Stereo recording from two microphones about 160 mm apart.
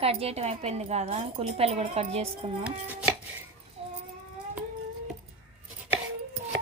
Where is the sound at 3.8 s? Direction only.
40° right (ahead or behind).